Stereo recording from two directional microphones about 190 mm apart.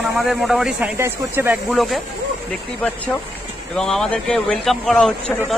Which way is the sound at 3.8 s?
5° left (ahead or behind).